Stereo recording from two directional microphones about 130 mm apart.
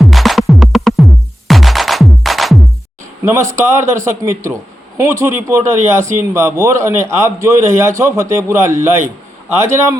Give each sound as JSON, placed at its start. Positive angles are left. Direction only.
{"t": 0.0, "sound": "music", "side_deg": 0}
{"t": 3.5, "sound": "speech", "side_deg": -20}